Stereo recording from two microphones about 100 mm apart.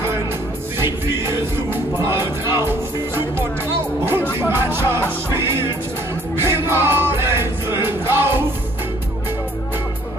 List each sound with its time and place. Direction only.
2.0 s music: 25° right (ahead or behind)